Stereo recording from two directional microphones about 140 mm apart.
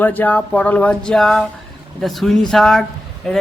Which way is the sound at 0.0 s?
10° left (ahead or behind).